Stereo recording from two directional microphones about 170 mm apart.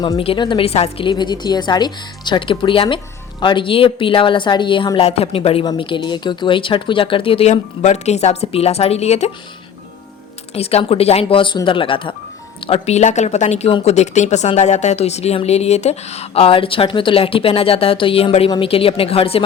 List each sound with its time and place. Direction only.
0.0 s a woman's voice: 30° left (ahead or behind)
10.5 s a woman's voice: 35° left (ahead or behind)